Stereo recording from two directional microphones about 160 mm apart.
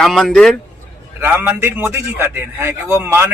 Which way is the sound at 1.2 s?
10° right (ahead or behind).